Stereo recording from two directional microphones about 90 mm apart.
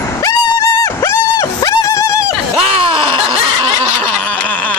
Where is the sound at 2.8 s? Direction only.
70° right (ahead or behind).